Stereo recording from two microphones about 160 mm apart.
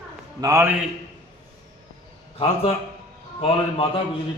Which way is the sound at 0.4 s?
15° right (ahead or behind).